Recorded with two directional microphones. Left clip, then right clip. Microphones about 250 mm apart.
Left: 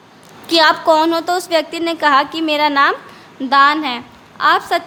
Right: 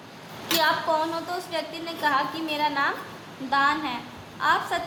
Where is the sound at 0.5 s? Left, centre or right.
Left.